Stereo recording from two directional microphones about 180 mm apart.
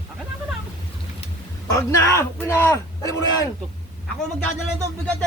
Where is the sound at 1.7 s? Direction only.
15° left (ahead or behind).